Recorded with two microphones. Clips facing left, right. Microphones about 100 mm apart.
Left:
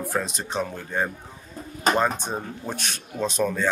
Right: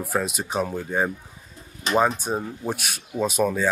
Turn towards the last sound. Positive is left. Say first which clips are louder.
# right 2 dB
turn(degrees=-10)  # may be behind; listen again after turning